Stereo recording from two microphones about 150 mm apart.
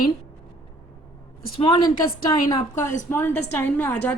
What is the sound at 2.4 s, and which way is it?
A woman's voice, 20° left (ahead or behind).